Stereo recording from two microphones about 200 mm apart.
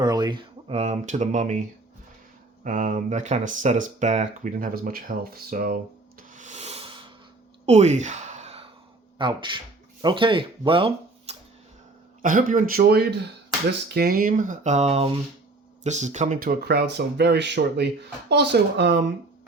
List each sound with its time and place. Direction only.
0.0 s speech: 20° right (ahead or behind); by 1.5 s 35° right (ahead or behind)
2.6 s speech: 40° right (ahead or behind)
7.6 s a sound: 35° right (ahead or behind)
9.1 s speech: 25° right (ahead or behind)
12.2 s speech: 40° right (ahead or behind); by 18.9 s 55° right (ahead or behind)